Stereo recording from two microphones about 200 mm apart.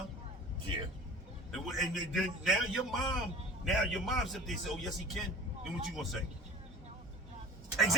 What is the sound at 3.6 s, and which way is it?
A man's voice, centre (ahead or behind).